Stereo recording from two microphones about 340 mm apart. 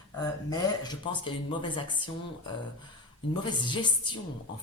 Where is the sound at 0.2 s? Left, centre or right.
Centre.